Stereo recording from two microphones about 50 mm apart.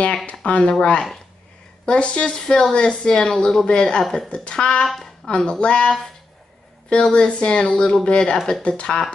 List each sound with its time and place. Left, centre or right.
0.3 s speech: left
1.9 s speech: left
4.0 s speech: centre
4.3 s speech: centre
4.8 s a sound: centre
5.3 s speech: centre